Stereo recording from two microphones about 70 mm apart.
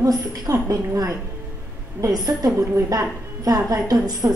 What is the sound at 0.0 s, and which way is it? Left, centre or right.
A woman's voice, right.